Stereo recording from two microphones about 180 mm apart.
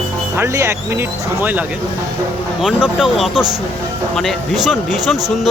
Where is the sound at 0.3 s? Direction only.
15° right (ahead or behind).